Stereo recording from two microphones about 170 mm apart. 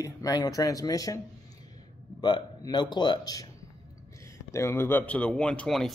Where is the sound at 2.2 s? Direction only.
25° left (ahead or behind).